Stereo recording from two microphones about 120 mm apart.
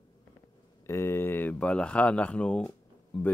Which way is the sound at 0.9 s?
20° left (ahead or behind).